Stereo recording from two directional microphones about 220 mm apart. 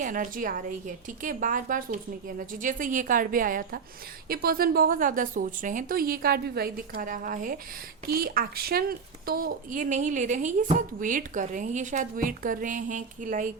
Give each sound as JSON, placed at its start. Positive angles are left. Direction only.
{"t": 0.0, "sound": "a woman's voice", "side_deg": -35}